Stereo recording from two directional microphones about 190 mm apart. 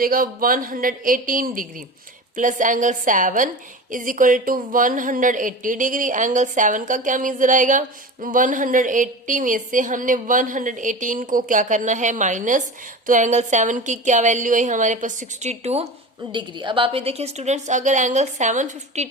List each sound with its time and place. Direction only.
0.0 s a woman's voice: 50° right (ahead or behind)